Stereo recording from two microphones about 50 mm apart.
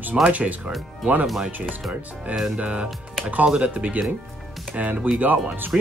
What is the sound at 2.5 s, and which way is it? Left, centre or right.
Speech, right.